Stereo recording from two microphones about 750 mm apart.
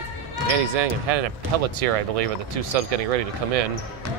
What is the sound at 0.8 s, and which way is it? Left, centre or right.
Speech, right.